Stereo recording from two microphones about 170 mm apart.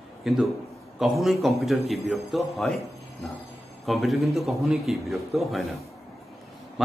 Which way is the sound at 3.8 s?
Centre (ahead or behind).